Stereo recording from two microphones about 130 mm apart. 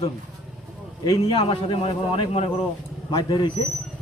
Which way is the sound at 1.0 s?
35° left (ahead or behind).